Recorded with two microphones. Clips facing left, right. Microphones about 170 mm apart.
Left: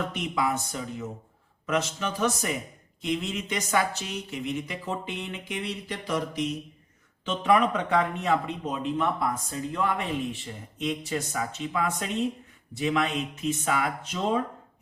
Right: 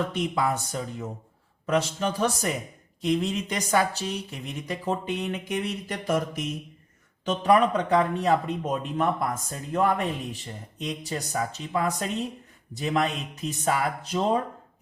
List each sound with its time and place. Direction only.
0.1 s speech: 35° right (ahead or behind)
7.3 s speech: 40° right (ahead or behind)